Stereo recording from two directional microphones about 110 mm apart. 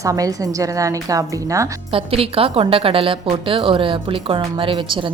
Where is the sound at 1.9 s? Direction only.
60° right (ahead or behind).